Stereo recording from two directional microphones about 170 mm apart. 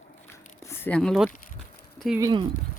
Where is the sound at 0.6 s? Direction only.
15° left (ahead or behind).